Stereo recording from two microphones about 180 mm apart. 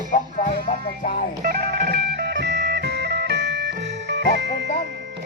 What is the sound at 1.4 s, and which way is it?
Music, 55° right (ahead or behind).